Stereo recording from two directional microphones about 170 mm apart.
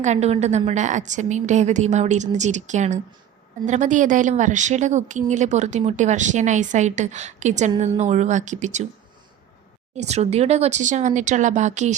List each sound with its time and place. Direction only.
0.0 s a woman's voice: 40° right (ahead or behind)
10.0 s a woman's voice: 40° right (ahead or behind)